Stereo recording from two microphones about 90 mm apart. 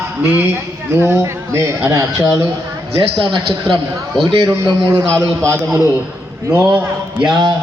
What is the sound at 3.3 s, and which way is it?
Speech, 65° right (ahead or behind).